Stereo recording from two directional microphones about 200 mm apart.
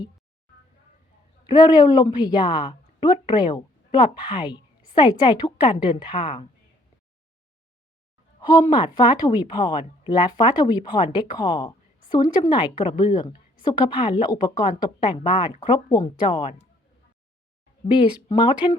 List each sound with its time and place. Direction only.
1.5 s speech: 20° left (ahead or behind)
8.4 s speech: 20° left (ahead or behind)
17.8 s speech: 25° left (ahead or behind)